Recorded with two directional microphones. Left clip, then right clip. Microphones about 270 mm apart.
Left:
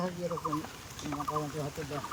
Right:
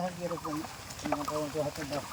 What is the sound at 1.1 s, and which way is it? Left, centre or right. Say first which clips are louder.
Speech: right 6 dB; right.